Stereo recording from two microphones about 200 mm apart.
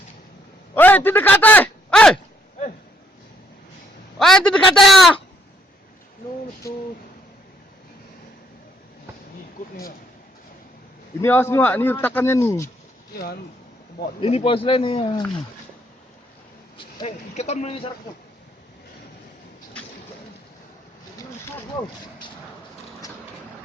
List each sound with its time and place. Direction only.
0.7 s a sound: 10° left (ahead or behind)
4.2 s a sound: 5° left (ahead or behind)
11.2 s a man's voice: 10° left (ahead or behind)
13.1 s speech: 50° left (ahead or behind)
14.2 s speech: 30° left (ahead or behind)
16.7 s speech: 30° left (ahead or behind)